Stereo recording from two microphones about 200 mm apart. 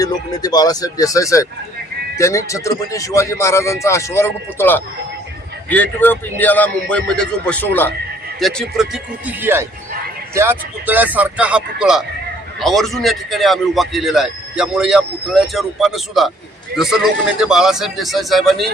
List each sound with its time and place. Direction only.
0.0 s a man's voice: 20° left (ahead or behind); by 18.7 s centre (ahead or behind)